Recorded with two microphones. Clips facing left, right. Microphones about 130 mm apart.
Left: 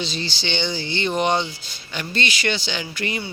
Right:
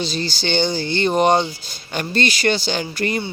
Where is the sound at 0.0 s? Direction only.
40° right (ahead or behind).